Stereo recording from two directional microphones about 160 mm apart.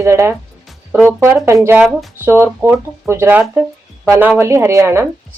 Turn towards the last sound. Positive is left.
turn(degrees=-15)  # may be behind; listen again after turning